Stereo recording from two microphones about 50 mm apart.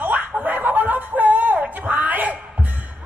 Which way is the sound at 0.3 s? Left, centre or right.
Right.